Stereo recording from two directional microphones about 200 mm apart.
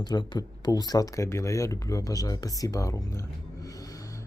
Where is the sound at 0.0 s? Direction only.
20° left (ahead or behind).